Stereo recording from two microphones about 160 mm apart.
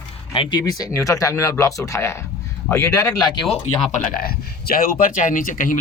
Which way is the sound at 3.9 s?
65° left (ahead or behind).